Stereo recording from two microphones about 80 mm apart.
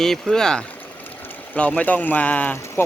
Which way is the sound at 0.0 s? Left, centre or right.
Centre.